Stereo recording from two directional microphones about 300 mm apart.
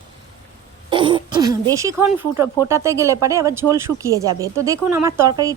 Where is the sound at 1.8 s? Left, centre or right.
Centre.